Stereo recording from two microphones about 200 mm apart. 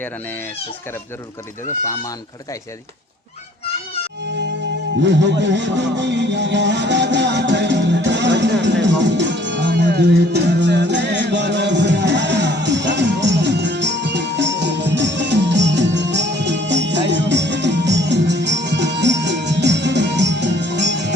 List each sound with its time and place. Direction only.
5.0 s music: 60° right (ahead or behind)